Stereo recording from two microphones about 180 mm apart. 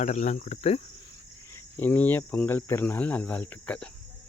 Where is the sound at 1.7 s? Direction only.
10° left (ahead or behind).